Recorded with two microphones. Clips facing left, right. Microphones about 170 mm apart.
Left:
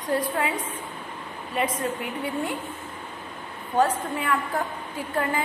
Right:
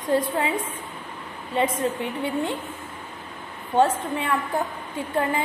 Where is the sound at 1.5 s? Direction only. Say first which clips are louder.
Right 3 dB; 25° right (ahead or behind).